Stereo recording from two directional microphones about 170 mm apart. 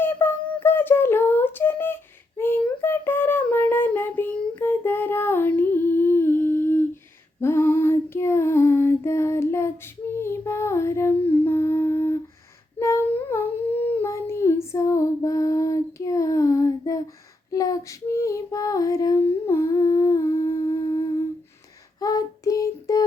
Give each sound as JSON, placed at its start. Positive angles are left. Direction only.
{"t": 0.0, "sound": "a sound", "side_deg": 10}
{"t": 2.4, "sound": "child singing", "side_deg": 15}
{"t": 7.4, "sound": "female singing", "side_deg": 15}
{"t": 12.8, "sound": "humming", "side_deg": 15}
{"t": 17.5, "sound": "child singing", "side_deg": 20}
{"t": 22.0, "sound": "child singing", "side_deg": 20}